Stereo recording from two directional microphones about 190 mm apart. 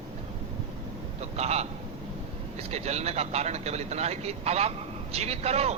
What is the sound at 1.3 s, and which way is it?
Speech, 35° right (ahead or behind).